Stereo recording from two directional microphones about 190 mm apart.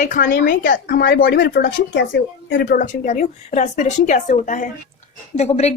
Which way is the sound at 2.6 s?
45° left (ahead or behind).